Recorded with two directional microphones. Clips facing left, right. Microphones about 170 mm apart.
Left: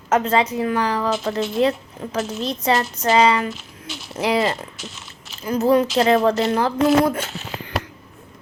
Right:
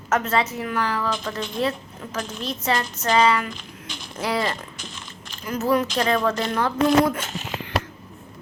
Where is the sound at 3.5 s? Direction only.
5° left (ahead or behind).